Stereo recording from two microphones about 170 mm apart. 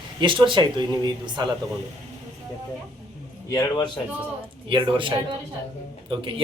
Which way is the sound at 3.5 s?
25° left (ahead or behind).